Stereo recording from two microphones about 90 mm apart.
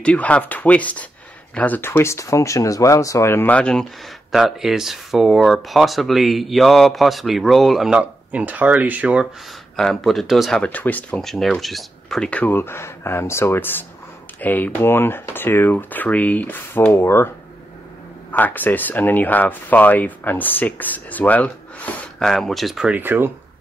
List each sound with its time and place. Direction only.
0.0 s speech: 15° left (ahead or behind)
4.3 s speech: 5° right (ahead or behind)
8.0 s speech: 15° right (ahead or behind)
9.8 s speech: 5° left (ahead or behind)
10.6 s speech: 15° left (ahead or behind)
11.1 s speech: 5° left (ahead or behind); by 17.3 s 30° left (ahead or behind)
18.3 s speech: 20° left (ahead or behind)
22.3 s speech: 5° left (ahead or behind)
22.8 s speech: 20° right (ahead or behind)